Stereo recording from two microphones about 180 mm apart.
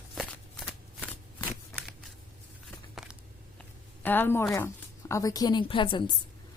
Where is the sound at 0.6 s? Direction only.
10° left (ahead or behind).